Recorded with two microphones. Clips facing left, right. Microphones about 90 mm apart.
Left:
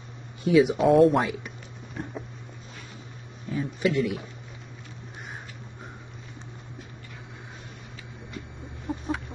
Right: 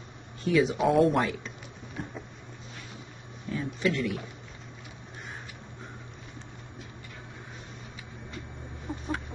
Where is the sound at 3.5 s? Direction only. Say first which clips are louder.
Left 4 dB; 15° left (ahead or behind).